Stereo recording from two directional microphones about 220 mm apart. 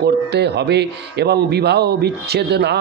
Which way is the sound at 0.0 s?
50° right (ahead or behind).